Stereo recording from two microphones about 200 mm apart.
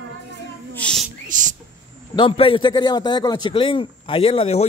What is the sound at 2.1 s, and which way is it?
A man's voice, 25° left (ahead or behind).